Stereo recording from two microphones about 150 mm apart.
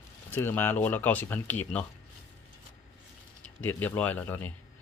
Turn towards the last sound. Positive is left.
turn(degrees=10)  # may be behind; listen again after turning